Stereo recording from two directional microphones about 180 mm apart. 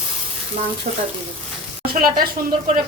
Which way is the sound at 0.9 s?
55° right (ahead or behind).